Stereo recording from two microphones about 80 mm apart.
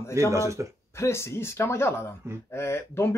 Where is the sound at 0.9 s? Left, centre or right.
Left.